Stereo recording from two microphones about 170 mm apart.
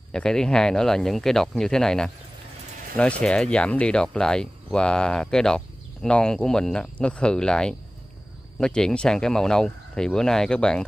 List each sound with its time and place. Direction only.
0.1 s speech: 5° left (ahead or behind)